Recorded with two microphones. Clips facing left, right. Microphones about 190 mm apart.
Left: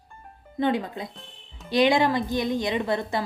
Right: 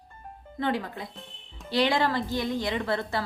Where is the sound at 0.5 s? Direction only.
20° left (ahead or behind).